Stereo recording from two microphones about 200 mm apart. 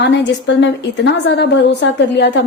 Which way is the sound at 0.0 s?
60° left (ahead or behind).